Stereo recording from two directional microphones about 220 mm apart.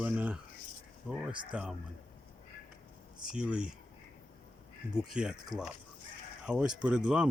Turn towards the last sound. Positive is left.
turn(degrees=-5)  # may be behind; listen again after turning